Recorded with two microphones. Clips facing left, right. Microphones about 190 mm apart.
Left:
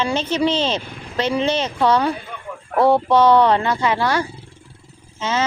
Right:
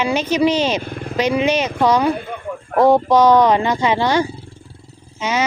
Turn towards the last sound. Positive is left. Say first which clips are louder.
# right 2 dB
turn(degrees=-15)  # may be behind; listen again after turning